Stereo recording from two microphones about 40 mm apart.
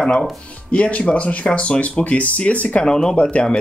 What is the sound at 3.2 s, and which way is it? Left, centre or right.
Speech, left.